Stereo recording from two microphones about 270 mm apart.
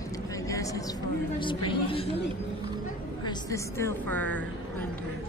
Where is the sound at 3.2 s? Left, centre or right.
Centre.